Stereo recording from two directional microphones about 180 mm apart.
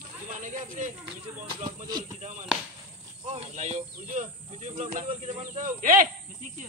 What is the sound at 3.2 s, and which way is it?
Speech, 40° right (ahead or behind).